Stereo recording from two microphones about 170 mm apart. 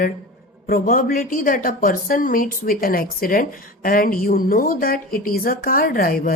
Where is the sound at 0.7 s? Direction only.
55° left (ahead or behind).